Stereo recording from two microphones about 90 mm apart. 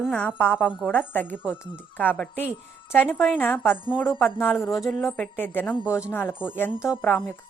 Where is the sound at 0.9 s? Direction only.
20° left (ahead or behind).